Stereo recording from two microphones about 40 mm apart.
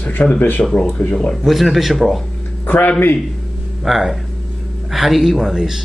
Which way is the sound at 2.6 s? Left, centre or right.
Left.